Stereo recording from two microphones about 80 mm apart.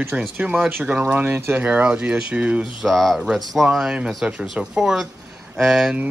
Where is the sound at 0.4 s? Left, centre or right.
Centre.